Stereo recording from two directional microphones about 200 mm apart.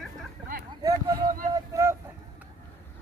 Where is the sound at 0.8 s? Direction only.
20° right (ahead or behind).